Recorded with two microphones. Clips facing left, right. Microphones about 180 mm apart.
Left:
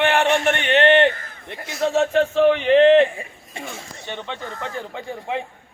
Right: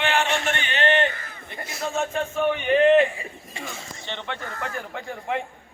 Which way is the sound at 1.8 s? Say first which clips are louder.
Left 8 dB; 80° left.